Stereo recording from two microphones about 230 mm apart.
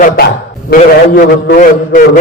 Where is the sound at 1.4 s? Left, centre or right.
Left.